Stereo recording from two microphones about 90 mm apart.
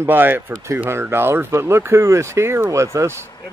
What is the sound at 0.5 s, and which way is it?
Speech, 35° right (ahead or behind).